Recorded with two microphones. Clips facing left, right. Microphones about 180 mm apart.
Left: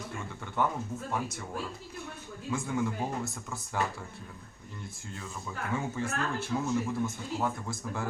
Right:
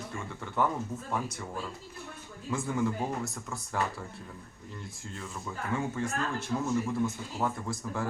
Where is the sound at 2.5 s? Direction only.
Centre (ahead or behind).